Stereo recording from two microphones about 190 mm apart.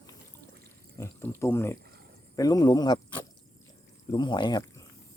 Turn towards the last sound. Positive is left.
turn(degrees=20)  # may be behind; listen again after turning